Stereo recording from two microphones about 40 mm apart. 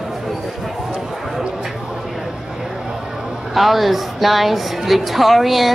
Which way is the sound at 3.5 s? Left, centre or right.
Centre.